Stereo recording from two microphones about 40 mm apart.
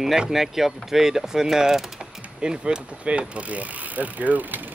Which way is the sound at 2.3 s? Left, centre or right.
Right.